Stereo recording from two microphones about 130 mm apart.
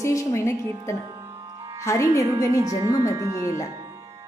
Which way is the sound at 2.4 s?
25° right (ahead or behind).